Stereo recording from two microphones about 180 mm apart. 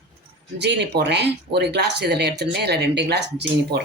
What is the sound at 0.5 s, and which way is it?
Speech, 70° right (ahead or behind).